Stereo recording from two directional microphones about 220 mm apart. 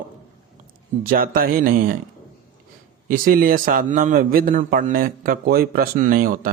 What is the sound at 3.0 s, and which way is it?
Speech, 40° right (ahead or behind).